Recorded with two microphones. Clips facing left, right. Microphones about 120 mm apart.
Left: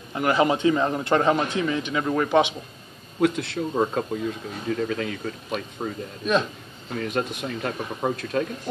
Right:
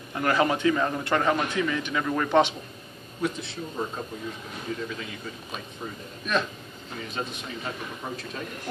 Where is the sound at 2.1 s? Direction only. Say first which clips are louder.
Left 2 dB; 10° left (ahead or behind).